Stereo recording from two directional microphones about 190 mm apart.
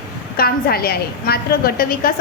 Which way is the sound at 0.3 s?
55° left (ahead or behind).